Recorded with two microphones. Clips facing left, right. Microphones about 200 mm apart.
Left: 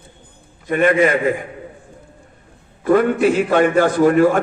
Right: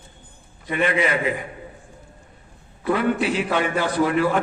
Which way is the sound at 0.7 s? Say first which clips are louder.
Left 7 dB; 50° left (ahead or behind).